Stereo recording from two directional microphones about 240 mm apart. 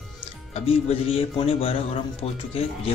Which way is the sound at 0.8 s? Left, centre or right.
Left.